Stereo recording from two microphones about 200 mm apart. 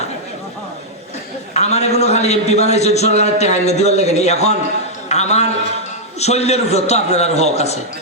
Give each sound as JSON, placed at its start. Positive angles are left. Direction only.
{"t": 1.5, "sound": "a man's voice", "side_deg": 35}
{"t": 5.0, "sound": "a sound", "side_deg": 35}
{"t": 6.1, "sound": "a man's voice", "side_deg": 30}